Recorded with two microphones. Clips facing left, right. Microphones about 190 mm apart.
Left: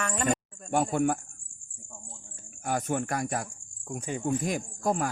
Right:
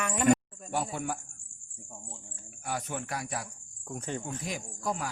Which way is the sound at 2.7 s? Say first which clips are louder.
Left 6 dB; 50° left (ahead or behind).